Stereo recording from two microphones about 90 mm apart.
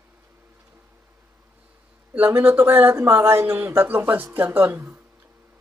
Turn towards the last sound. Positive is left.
turn(degrees=-20)  # may be behind; listen again after turning